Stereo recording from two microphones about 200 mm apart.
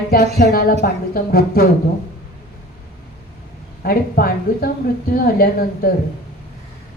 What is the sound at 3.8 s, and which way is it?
A woman's voice, 50° left (ahead or behind).